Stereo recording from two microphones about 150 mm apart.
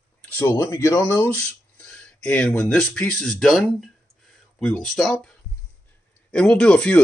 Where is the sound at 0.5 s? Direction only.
20° left (ahead or behind).